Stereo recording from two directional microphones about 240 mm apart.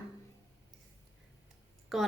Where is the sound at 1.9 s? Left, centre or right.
Centre.